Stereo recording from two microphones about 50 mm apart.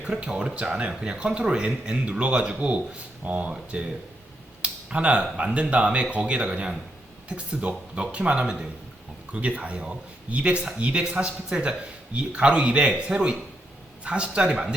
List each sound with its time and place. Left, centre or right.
0.3 s speech: centre